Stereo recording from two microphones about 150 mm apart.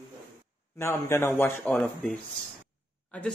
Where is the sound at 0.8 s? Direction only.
15° left (ahead or behind).